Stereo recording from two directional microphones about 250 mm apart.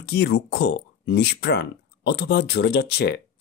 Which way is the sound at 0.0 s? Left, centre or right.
Left.